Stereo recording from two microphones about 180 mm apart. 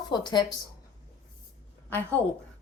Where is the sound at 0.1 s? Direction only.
25° left (ahead or behind).